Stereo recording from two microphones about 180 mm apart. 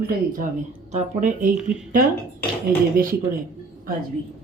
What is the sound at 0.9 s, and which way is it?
Speech, 45° right (ahead or behind).